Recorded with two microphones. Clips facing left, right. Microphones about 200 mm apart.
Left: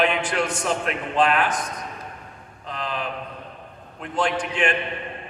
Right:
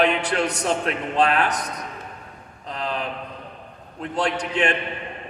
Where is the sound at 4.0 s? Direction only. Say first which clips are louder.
Even; 40° right (ahead or behind).